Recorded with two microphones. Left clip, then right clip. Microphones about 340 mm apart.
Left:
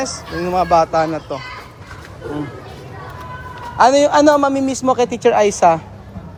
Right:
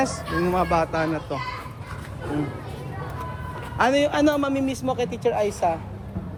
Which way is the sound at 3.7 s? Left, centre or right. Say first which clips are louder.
Left 9 dB; centre.